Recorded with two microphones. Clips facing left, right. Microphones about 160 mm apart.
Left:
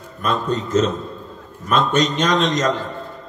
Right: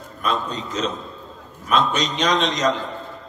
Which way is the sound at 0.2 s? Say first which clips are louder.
Left 4 dB; 45° left (ahead or behind).